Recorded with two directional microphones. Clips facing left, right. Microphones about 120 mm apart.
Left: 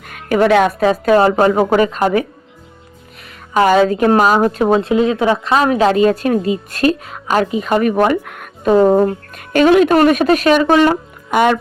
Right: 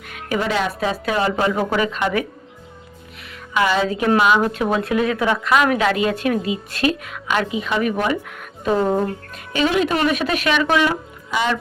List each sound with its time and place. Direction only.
0.3 s speech: 65° left (ahead or behind); by 2.2 s 40° left (ahead or behind)
3.5 s a woman's voice: 45° left (ahead or behind)